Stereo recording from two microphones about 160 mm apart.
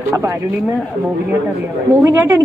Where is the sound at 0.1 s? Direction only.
20° right (ahead or behind).